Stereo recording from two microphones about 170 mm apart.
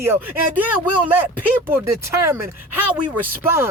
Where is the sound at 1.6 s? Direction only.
15° right (ahead or behind).